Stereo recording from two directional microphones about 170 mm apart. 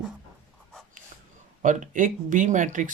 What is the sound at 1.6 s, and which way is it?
Speech, 45° right (ahead or behind).